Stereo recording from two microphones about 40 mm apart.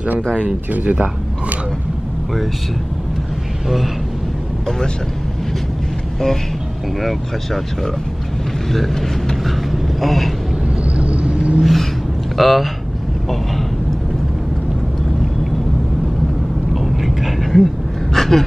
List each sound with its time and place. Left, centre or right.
0.2 s speech: left
0.7 s speech: right
3.6 s speech: centre
4.6 s speech: centre
7.0 s speech: centre
9.4 s vehicle: centre
11.0 s vehicle: right
11.6 s a sound: centre
12.4 s speech: centre
16.7 s a sound: centre